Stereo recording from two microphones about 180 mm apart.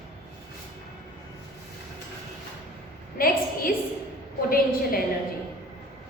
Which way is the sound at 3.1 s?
50° left (ahead or behind).